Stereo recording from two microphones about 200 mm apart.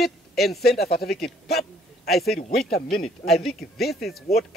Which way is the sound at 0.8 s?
50° left (ahead or behind).